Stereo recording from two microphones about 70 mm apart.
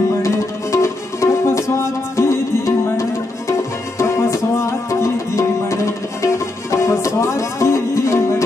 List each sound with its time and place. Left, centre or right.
0.2 s music: left